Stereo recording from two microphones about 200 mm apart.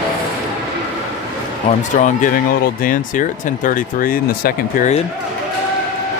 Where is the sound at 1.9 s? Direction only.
40° left (ahead or behind).